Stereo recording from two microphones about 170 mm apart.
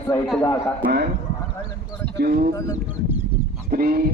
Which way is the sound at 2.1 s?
70° right (ahead or behind).